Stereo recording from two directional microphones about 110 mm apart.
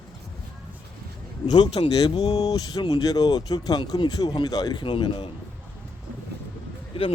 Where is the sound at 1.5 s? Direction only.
45° left (ahead or behind).